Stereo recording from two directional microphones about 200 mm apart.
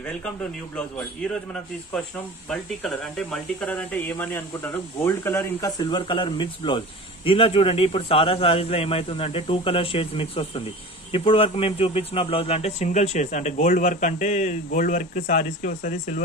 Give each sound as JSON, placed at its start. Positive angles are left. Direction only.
{"t": 0.0, "sound": "a man's voice", "side_deg": 5}